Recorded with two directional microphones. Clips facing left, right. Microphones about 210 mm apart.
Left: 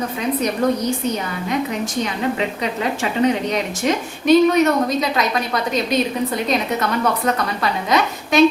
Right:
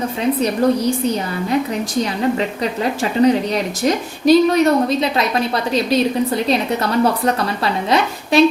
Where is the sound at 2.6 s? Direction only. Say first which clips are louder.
Right 2 dB; 35° right (ahead or behind).